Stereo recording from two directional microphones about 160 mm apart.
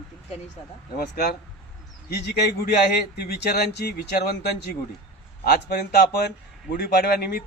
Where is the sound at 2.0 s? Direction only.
85° left.